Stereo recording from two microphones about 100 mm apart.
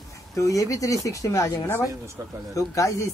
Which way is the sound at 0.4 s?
35° left (ahead or behind).